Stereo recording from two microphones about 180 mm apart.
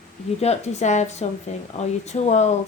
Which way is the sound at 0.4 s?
40° left (ahead or behind).